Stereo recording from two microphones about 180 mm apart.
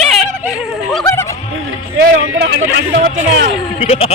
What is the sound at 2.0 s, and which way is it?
Speech, 85° right.